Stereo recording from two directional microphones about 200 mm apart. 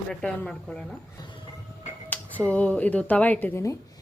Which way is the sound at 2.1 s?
10° left (ahead or behind).